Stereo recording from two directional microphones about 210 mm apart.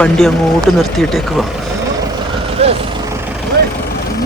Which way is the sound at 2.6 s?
30° right (ahead or behind).